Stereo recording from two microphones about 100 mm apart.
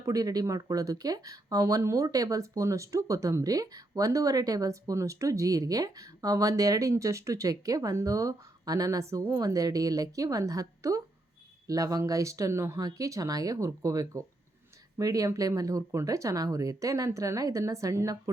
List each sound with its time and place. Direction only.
0.0 s speech: 35° right (ahead or behind)